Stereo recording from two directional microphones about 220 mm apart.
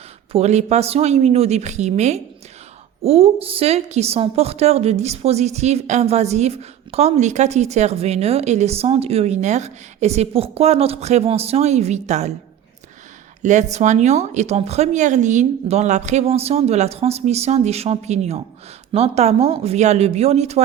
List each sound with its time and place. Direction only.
0.3 s a woman's voice: 30° right (ahead or behind)
13.4 s a woman's voice: 35° right (ahead or behind)